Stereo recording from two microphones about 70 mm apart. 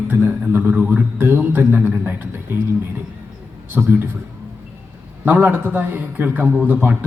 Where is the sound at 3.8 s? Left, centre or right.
Right.